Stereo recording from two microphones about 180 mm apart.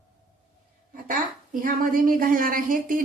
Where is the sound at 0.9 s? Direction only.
50° right (ahead or behind).